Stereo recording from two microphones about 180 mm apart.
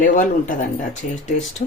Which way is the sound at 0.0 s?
45° left (ahead or behind).